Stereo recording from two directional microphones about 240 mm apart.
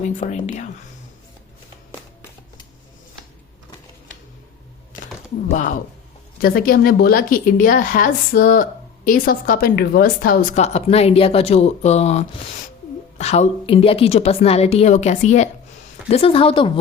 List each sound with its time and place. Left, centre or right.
0.0 s a woman's voice: left
4.9 s a sound: left
5.5 s a woman's voice: left